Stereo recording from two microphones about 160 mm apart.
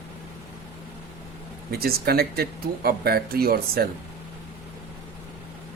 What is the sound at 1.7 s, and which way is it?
Speech, 75° right (ahead or behind).